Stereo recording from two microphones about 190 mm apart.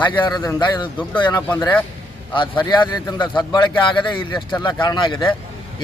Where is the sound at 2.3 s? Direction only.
25° left (ahead or behind).